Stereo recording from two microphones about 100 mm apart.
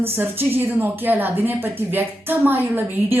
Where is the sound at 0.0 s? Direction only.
20° right (ahead or behind).